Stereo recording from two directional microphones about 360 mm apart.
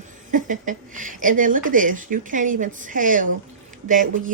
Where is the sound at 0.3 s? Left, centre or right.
Right.